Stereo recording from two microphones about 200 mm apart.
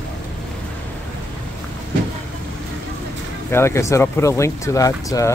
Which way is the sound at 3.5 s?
15° left (ahead or behind).